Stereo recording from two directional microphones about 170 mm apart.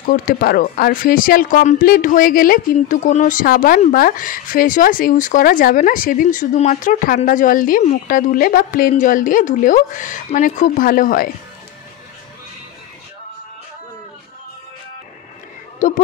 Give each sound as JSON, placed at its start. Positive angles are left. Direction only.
{"t": 0.1, "sound": "speech", "side_deg": 55}
{"t": 15.8, "sound": "speech", "side_deg": 50}